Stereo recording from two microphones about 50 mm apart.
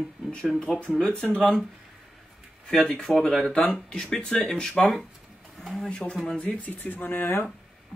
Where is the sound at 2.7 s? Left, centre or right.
Centre.